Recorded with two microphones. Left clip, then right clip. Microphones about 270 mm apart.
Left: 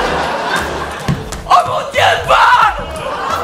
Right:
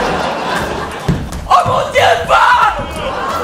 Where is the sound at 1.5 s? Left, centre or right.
Left.